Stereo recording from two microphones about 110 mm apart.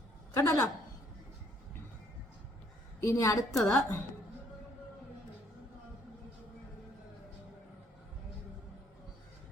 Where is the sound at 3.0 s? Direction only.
25° left (ahead or behind).